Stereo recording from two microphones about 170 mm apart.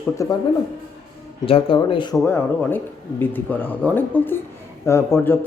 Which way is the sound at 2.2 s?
10° left (ahead or behind).